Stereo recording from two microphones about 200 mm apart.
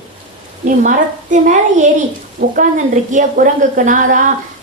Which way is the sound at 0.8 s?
40° right (ahead or behind).